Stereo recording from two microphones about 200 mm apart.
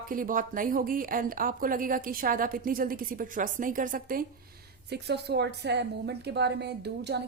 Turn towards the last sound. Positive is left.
turn(degrees=-55)  # may be behind; listen again after turning